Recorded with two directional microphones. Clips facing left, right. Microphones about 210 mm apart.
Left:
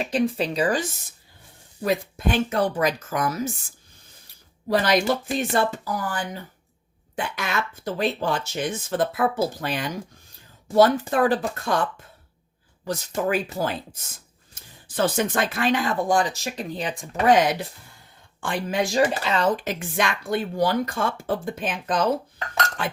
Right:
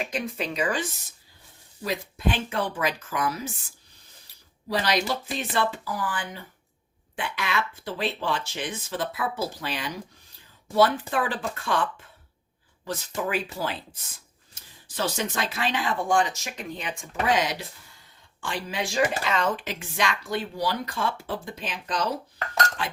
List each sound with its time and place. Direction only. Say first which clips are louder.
0.0 s speech: left 7 dB; 35° left (ahead or behind)
1.8 s speech: left 4 dB; 50° left (ahead or behind)
4.7 s speech: left 5 dB; 50° left (ahead or behind)
17.3 s speech: left 6 dB; 55° left (ahead or behind)